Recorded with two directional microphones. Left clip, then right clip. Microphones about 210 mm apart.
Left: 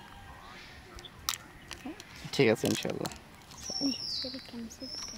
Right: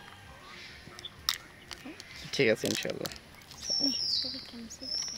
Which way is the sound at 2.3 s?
40° left (ahead or behind).